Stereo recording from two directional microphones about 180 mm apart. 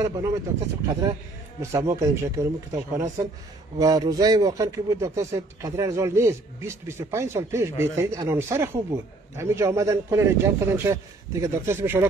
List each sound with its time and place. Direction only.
0.0 s a man's voice: 20° right (ahead or behind)
1.6 s a man's voice: 15° right (ahead or behind)